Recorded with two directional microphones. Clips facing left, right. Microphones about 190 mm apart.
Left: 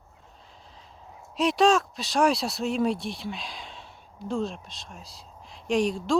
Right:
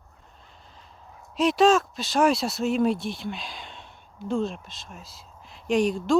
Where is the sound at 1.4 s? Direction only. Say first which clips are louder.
Right 2 dB; centre (ahead or behind).